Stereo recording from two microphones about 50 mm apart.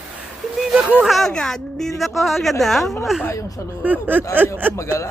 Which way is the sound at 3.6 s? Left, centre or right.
Left.